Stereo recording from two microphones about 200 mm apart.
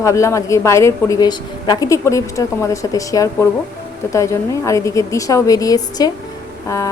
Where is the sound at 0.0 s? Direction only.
15° left (ahead or behind).